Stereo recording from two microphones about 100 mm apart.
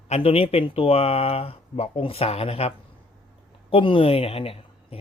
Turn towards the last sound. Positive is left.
turn(degrees=75)  # may be behind; listen again after turning